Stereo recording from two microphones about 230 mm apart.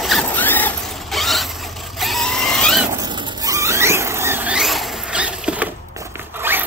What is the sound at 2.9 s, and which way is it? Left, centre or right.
Squeal, centre.